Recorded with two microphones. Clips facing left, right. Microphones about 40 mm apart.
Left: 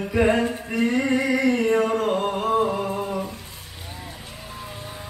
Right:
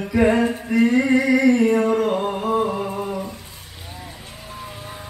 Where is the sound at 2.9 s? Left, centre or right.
Centre.